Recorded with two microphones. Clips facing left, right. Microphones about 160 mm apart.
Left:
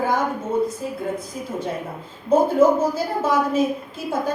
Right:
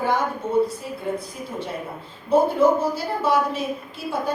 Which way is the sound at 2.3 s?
45° left (ahead or behind).